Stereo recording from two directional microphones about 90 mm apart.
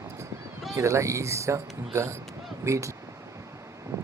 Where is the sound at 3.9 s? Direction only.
30° right (ahead or behind).